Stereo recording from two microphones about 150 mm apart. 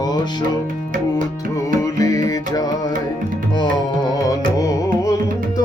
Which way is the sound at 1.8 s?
25° left (ahead or behind).